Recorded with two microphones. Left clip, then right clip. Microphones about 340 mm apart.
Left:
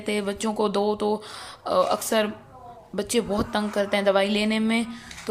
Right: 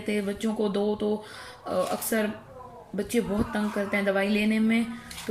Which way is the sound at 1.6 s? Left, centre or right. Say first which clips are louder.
Left 6 dB; left.